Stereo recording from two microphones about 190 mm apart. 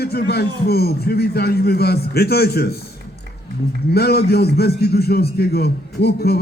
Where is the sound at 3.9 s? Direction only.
55° left (ahead or behind).